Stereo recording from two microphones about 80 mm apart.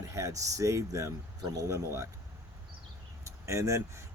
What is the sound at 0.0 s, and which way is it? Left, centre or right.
Speech, right.